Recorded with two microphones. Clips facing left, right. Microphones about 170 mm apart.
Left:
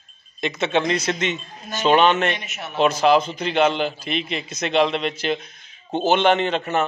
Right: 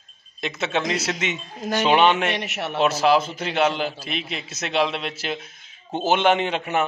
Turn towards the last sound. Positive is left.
turn(degrees=-10)  # may be behind; listen again after turning